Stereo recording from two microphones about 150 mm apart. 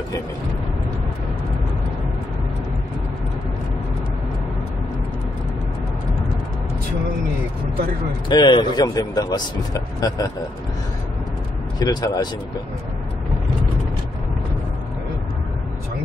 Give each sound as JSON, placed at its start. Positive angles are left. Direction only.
{"t": 8.3, "sound": "speech", "side_deg": 30}
{"t": 11.8, "sound": "speech", "side_deg": 25}